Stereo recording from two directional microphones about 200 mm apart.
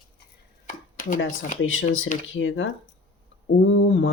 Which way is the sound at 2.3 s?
75° left (ahead or behind).